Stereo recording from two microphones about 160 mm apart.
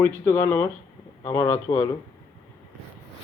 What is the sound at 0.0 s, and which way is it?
Speech, 20° left (ahead or behind).